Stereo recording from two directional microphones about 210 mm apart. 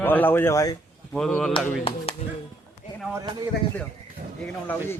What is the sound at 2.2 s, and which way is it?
Speech, 30° left (ahead or behind).